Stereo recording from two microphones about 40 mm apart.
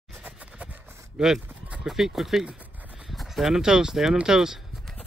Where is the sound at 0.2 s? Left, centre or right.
Right.